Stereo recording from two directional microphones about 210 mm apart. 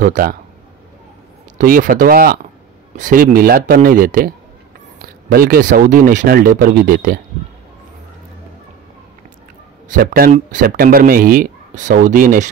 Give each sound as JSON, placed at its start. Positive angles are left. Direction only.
{"t": 0.0, "sound": "speech", "side_deg": -40}
{"t": 1.6, "sound": "speech", "side_deg": -40}
{"t": 9.8, "sound": "speech", "side_deg": -45}